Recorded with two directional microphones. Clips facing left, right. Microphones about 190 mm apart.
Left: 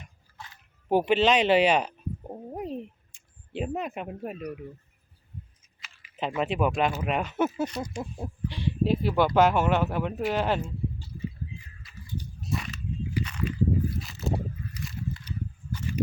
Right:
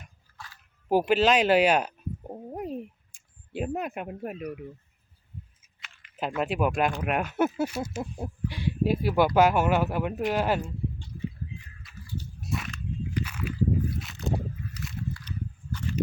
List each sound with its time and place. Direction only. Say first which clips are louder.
0.3 s music: left 1 dB; 20° left (ahead or behind)
0.9 s bird: even; 5° right (ahead or behind)
3.5 s speech: even; 5° right (ahead or behind)
5.8 s speech: even; centre (ahead or behind)
12.5 s biting: left 1 dB; centre (ahead or behind)
14.0 s a sound: even; centre (ahead or behind)